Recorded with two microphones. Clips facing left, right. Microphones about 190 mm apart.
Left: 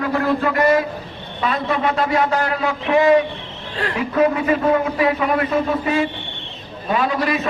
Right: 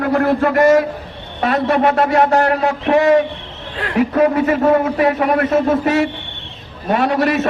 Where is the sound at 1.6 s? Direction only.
70° right (ahead or behind).